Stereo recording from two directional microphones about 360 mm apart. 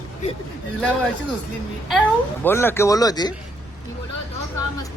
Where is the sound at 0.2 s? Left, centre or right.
Centre.